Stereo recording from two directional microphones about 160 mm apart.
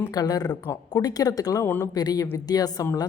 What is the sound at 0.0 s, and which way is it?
Speech, 25° left (ahead or behind).